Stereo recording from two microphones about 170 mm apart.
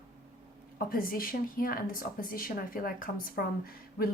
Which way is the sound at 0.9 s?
60° left (ahead or behind).